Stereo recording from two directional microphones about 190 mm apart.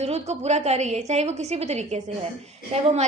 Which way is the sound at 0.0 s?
35° right (ahead or behind).